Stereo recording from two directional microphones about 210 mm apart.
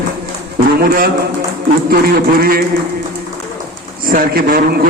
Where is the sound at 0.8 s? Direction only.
45° right (ahead or behind).